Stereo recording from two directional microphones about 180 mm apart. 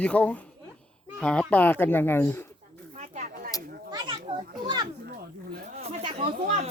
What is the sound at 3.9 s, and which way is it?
Children playing, 25° right (ahead or behind).